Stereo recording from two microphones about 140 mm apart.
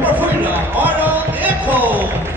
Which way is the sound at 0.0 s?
10° right (ahead or behind).